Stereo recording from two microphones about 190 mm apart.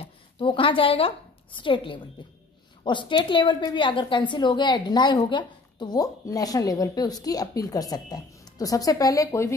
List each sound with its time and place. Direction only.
0.0 s a woman's voice: 25° left (ahead or behind)